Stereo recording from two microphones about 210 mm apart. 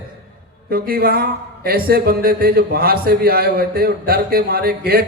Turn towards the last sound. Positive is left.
turn(degrees=-45)  # may be behind; listen again after turning